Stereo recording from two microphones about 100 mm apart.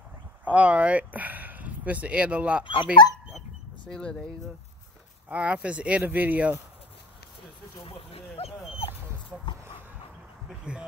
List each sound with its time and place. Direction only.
0.5 s speech: 15° right (ahead or behind)
2.6 s speech: 60° left (ahead or behind)
3.8 s speech: 10° left (ahead or behind)
5.3 s speech: 10° right (ahead or behind)
7.8 s speech: 70° left (ahead or behind)
10.6 s speech: 10° right (ahead or behind)